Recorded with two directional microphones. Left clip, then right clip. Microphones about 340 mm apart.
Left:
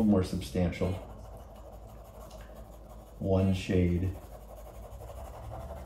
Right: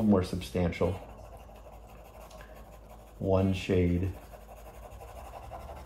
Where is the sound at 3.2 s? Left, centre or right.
Centre.